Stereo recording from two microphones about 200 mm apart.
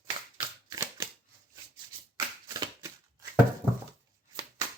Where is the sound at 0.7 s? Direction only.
15° right (ahead or behind).